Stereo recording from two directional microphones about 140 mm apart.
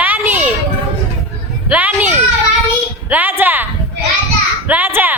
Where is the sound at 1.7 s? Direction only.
10° right (ahead or behind).